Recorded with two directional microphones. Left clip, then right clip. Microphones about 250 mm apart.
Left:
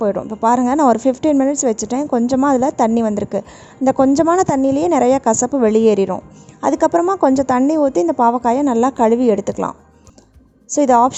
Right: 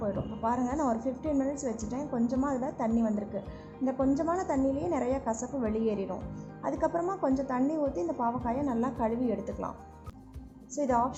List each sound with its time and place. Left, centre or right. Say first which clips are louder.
0.0 s a woman's voice: left 16 dB; left